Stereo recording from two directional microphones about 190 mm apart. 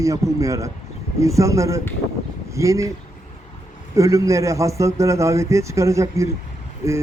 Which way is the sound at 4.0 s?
15° right (ahead or behind).